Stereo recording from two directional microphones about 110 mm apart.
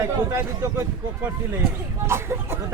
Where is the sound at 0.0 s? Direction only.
25° right (ahead or behind).